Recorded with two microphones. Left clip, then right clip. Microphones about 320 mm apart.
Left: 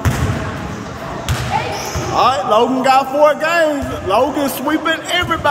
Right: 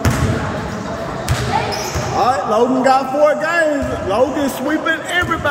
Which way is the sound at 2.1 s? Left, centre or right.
Centre.